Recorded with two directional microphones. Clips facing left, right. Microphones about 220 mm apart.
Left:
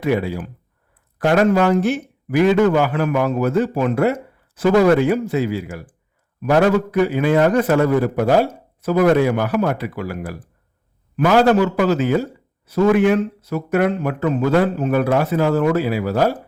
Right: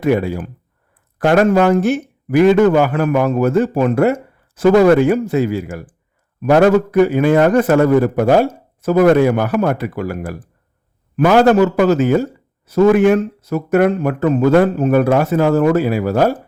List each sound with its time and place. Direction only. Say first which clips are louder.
0.0 s a man's voice: right 4 dB; 50° right (ahead or behind)